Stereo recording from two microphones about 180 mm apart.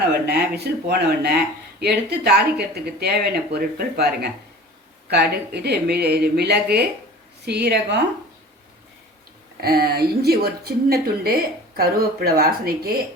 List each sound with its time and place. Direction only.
0.1 s a woman's voice: 65° right (ahead or behind)
9.6 s speech: 60° right (ahead or behind)